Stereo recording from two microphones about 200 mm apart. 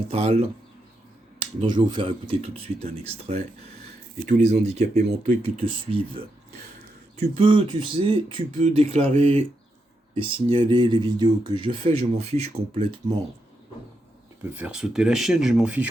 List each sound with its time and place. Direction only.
0.1 s speech: 30° right (ahead or behind)
1.6 s speech: 20° right (ahead or behind)
7.2 s speech: 25° right (ahead or behind)
14.5 s speech: 5° right (ahead or behind)